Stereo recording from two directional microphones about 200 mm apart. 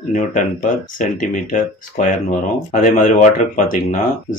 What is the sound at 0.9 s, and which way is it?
Speech, 40° left (ahead or behind).